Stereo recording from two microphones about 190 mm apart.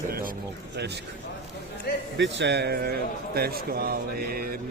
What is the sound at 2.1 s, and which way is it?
A man's voice, 70° right (ahead or behind).